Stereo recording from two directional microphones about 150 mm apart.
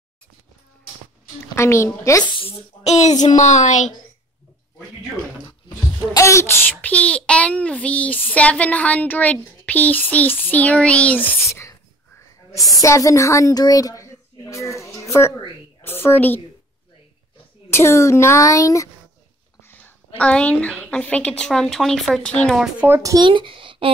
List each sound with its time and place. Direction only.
1.5 s a woman's voice: 20° left (ahead or behind)
2.3 s speech: 40° left (ahead or behind)
6.1 s speech: 20° left (ahead or behind)
6.9 s child singing: 10° left (ahead or behind)
12.8 s a woman's voice: 20° left (ahead or behind)
17.6 s speech: 20° left (ahead or behind)
20.2 s child singing: 10° left (ahead or behind)
22.6 s speech: 10° right (ahead or behind); by 23.9 s 35° right (ahead or behind)